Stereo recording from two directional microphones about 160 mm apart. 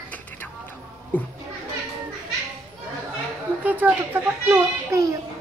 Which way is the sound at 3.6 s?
10° right (ahead or behind).